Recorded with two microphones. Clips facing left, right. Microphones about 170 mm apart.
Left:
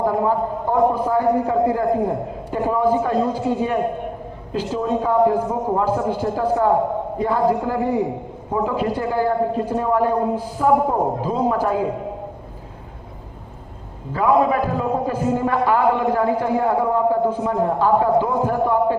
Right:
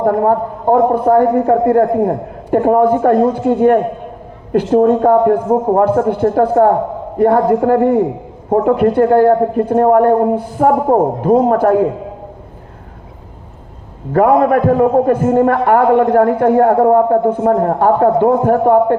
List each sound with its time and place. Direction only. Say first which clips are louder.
0.0 s a man's voice: right 6 dB; 60° right (ahead or behind)
14.1 s a man's voice: right 7 dB; 60° right (ahead or behind)